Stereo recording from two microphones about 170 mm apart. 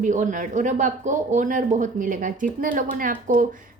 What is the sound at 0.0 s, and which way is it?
Speech, 50° right (ahead or behind).